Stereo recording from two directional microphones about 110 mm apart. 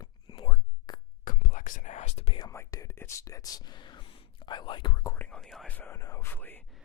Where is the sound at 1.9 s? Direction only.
90° left.